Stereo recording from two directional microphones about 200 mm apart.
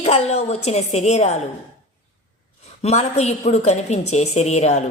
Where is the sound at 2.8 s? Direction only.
35° left (ahead or behind).